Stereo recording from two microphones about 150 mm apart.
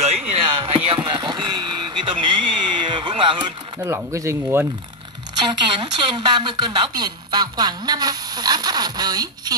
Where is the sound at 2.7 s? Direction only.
30° right (ahead or behind).